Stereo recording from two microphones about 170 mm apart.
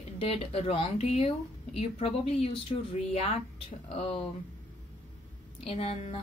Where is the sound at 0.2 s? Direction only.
35° left (ahead or behind).